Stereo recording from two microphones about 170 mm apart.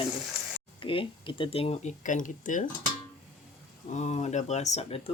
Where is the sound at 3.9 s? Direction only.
40° left (ahead or behind).